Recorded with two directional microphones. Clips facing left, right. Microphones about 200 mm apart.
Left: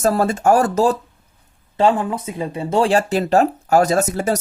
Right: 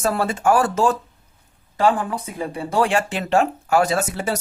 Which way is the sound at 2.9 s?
35° left (ahead or behind).